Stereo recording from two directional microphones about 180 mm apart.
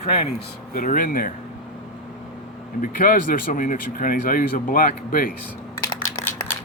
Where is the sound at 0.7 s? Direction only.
50° left (ahead or behind).